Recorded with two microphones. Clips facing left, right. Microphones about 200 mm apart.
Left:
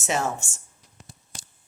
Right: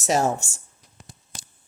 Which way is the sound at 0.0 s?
35° right (ahead or behind).